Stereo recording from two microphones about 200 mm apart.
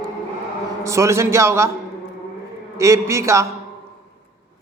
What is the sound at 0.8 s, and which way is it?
Speech, 15° right (ahead or behind).